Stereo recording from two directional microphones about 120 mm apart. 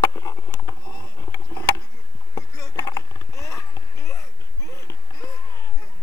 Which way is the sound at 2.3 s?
30° left (ahead or behind).